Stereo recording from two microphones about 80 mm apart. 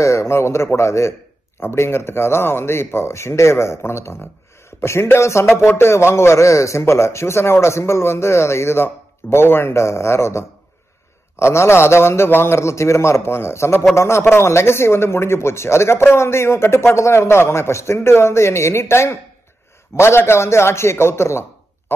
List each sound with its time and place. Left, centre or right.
0.0 s speech: left